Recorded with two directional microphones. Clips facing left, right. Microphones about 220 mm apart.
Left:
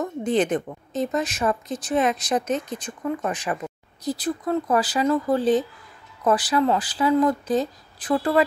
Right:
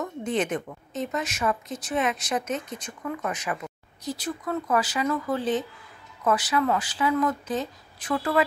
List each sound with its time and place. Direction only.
0.0 s a woman's voice: 35° left (ahead or behind)